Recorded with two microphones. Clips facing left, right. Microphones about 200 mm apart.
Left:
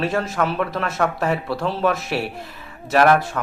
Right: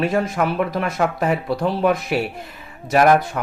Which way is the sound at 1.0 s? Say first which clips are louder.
Right 1 dB; centre (ahead or behind).